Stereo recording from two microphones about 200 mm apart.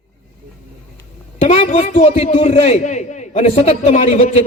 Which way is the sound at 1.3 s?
30° left (ahead or behind).